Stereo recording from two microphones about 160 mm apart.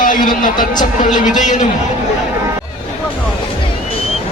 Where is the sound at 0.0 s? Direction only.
55° left (ahead or behind).